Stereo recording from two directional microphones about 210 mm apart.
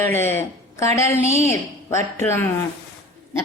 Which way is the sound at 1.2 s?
30° right (ahead or behind).